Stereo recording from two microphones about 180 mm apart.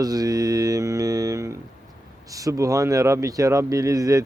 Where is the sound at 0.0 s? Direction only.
20° right (ahead or behind).